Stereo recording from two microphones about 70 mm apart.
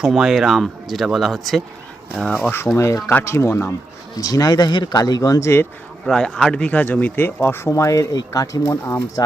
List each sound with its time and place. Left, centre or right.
0.0 s speech: centre
2.3 s speech: left
2.7 s speech: left
4.2 s speech: left
6.1 s speech: centre
6.7 s speech: left
7.4 s speech: left
7.7 s speech: left
8.6 s speech: left
9.2 s speech: left